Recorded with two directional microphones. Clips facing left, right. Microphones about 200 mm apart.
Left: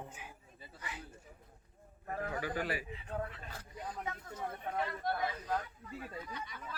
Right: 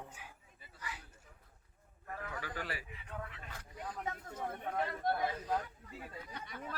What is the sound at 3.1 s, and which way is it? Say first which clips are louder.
Speech: left 5 dB; 35° left (ahead or behind).